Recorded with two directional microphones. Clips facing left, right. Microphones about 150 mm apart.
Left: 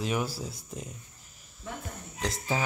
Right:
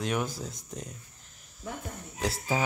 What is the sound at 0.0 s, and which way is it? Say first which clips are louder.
Speech: even; 5° left (ahead or behind).